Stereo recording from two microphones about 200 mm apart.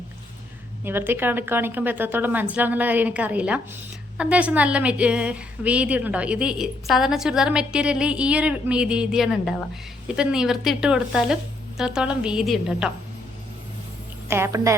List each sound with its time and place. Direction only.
0.9 s a woman's voice: 10° right (ahead or behind)
14.3 s a woman's voice: 15° right (ahead or behind)